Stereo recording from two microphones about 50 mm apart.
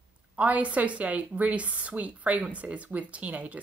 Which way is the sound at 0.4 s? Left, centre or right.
Right.